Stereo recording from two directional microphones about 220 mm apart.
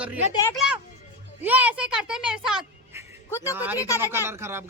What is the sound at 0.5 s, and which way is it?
A woman's voice, 5° right (ahead or behind).